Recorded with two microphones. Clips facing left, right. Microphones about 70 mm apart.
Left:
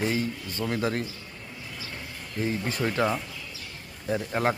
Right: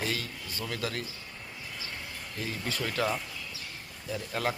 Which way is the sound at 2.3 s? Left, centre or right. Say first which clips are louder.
Left 7 dB; left.